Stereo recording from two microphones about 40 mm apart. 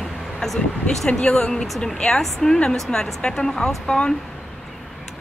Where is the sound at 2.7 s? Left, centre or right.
Centre.